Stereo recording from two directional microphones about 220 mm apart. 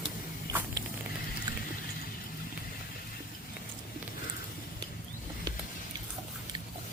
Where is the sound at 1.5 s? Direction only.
15° right (ahead or behind).